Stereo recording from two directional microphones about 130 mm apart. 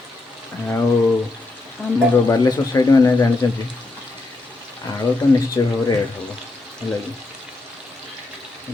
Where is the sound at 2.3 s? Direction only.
25° left (ahead or behind).